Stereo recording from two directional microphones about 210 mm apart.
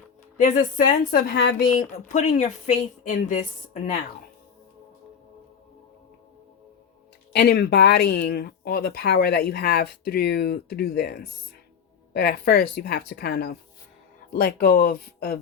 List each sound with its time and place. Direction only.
0.3 s speech: 40° left (ahead or behind)
1.8 s a woman's voice: 35° left (ahead or behind)
7.3 s speech: 50° left (ahead or behind)